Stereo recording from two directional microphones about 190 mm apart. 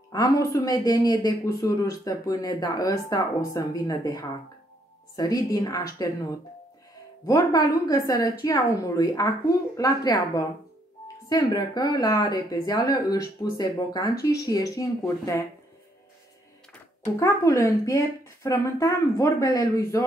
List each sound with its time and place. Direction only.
0.1 s speech: 20° left (ahead or behind)
7.2 s speech: 20° left (ahead or behind)
17.2 s speech: 15° left (ahead or behind)